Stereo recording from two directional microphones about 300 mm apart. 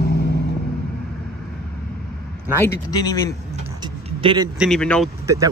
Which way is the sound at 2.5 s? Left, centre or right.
Centre.